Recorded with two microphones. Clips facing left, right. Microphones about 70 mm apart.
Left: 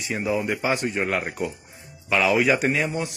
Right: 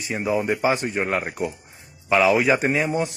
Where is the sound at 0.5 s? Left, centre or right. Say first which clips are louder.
Right 3 dB; centre.